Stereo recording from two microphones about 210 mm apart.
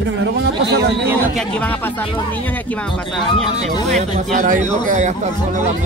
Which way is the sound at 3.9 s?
35° right (ahead or behind).